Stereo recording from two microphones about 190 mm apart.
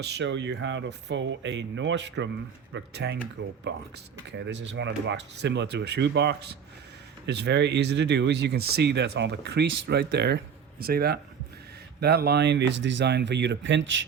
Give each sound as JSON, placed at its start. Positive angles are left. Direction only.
{"t": 0.1, "sound": "speech", "side_deg": -70}